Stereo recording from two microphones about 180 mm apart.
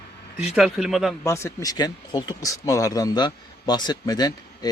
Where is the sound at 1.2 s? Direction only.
15° left (ahead or behind).